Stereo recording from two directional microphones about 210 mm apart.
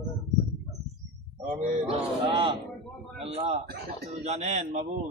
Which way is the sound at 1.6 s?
25° right (ahead or behind).